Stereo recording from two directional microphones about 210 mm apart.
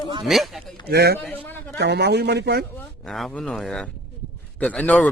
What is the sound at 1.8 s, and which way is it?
Speech, 50° right (ahead or behind).